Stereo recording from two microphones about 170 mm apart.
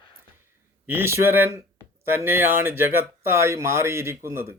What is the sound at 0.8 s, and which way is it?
Speech, 15° right (ahead or behind).